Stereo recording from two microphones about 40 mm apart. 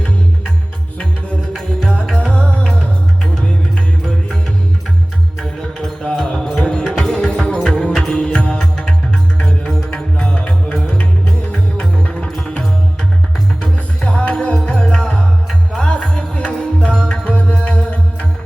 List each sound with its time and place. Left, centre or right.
2.2 s music: left
5.4 s music: centre
7.9 s music: centre
8.2 s music: left